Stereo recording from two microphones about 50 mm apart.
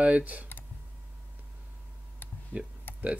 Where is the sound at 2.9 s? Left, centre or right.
Left.